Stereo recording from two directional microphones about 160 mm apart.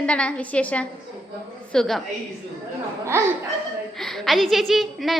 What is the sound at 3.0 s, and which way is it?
Speech, 15° right (ahead or behind).